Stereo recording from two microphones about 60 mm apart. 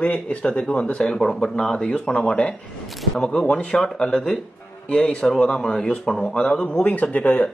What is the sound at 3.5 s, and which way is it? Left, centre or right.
Speech, left.